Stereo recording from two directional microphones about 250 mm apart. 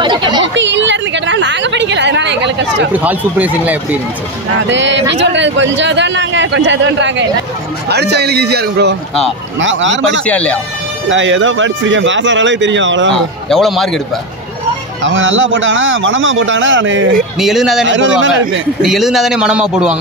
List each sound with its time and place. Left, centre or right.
0.0 s a sound: centre
0.4 s a sound: right
2.9 s speech: centre
4.6 s a man's voice: right
10.2 s a man's voice: centre
11.1 s a man's voice: right
13.1 s a man's voice: centre
15.0 s a man's voice: right
17.4 s a man's voice: centre
17.8 s a man's voice: right
18.8 s a man's voice: centre